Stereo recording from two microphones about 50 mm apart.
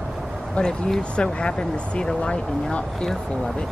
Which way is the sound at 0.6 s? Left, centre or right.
Centre.